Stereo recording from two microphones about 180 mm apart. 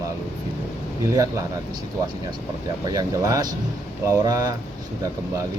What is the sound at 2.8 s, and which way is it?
Speech, 20° right (ahead or behind).